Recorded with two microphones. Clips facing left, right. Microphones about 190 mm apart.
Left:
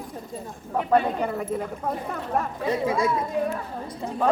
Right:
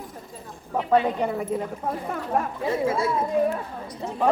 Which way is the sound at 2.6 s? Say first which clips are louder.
Left 1 dB; 20° left (ahead or behind).